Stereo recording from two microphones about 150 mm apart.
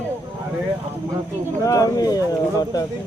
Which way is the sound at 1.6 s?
25° left (ahead or behind).